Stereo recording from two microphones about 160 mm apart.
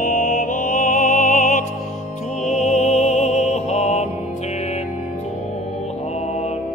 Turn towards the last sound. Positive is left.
turn(degrees=45)  # may be behind; listen again after turning